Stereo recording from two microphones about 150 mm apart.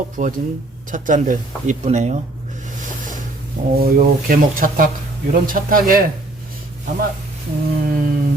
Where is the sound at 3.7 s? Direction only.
75° right (ahead or behind).